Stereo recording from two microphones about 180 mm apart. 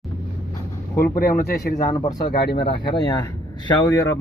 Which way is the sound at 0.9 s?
55° left (ahead or behind).